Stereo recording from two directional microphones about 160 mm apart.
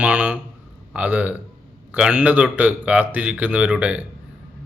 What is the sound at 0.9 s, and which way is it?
A man's voice, 10° right (ahead or behind).